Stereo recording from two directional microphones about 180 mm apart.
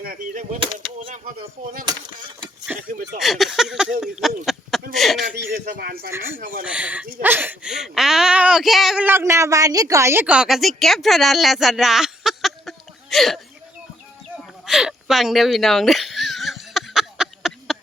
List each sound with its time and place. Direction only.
0.0 s speech: 50° right (ahead or behind)
0.6 s a sound: 30° right (ahead or behind)
2.7 s speech: 10° right (ahead or behind)
4.5 s a sound: centre (ahead or behind)
4.9 s speech: centre (ahead or behind)
5.5 s speech: 50° right (ahead or behind)
6.1 s speech: 15° right (ahead or behind)
9.0 s a woman's voice: 15° right (ahead or behind)
14.3 s a sound: 5° right (ahead or behind)